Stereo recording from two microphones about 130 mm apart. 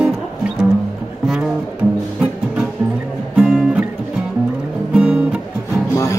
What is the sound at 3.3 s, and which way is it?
Music, 5° right (ahead or behind).